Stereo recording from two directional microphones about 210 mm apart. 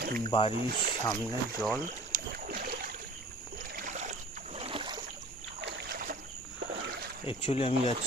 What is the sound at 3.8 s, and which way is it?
Boat, 35° right (ahead or behind).